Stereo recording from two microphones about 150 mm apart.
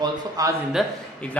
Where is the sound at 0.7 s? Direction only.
5° left (ahead or behind).